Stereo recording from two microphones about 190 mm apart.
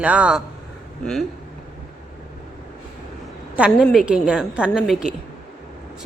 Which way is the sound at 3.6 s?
Centre (ahead or behind).